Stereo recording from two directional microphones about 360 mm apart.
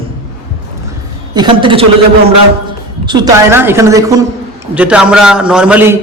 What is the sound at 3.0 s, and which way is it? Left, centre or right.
A woman's voice, centre.